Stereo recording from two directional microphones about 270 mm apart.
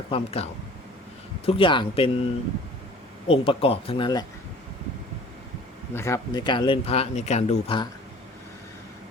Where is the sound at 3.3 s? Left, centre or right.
Left.